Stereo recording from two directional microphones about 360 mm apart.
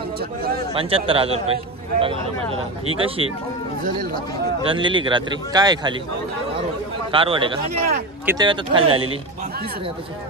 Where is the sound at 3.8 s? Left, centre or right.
Right.